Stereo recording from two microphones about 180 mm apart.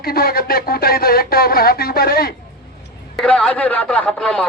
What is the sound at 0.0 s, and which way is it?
Speech, 55° left (ahead or behind).